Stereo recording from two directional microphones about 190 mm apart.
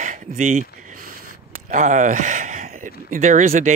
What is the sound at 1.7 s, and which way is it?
Speech, 40° right (ahead or behind).